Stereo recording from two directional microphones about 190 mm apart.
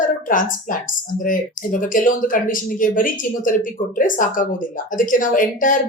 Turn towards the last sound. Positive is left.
turn(degrees=45)  # may be behind; listen again after turning